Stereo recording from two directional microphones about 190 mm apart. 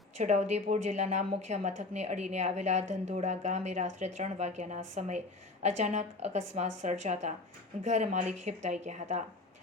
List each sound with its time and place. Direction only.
0.2 s a woman's voice: 35° right (ahead or behind)